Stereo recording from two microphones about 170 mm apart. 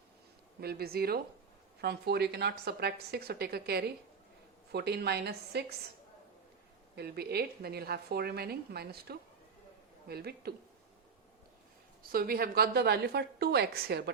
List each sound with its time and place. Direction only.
0.6 s a woman's voice: 65° right (ahead or behind)
6.9 s a woman's voice: 70° right (ahead or behind)
12.0 s a woman's voice: 60° right (ahead or behind)